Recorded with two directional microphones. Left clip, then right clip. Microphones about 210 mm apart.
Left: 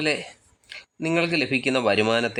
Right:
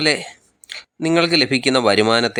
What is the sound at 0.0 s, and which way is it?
Speech, 15° right (ahead or behind).